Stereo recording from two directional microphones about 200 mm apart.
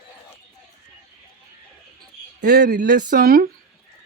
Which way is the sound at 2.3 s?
55° right (ahead or behind).